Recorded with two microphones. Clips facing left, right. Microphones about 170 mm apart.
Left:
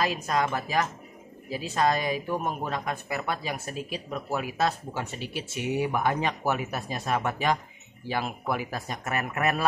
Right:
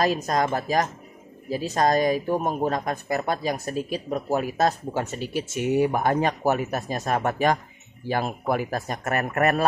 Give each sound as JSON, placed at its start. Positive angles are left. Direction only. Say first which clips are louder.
{"t": 0.0, "sound": "a woman's voice", "louder": "right 4 dB", "side_deg": -40}